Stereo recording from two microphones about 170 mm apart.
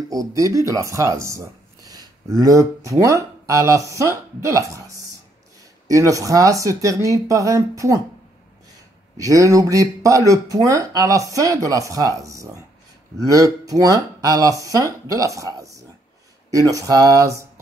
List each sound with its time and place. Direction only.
0.1 s speech: 20° right (ahead or behind)
9.1 s speech: 20° right (ahead or behind)